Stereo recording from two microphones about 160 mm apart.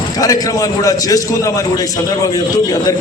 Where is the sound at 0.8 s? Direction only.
20° left (ahead or behind).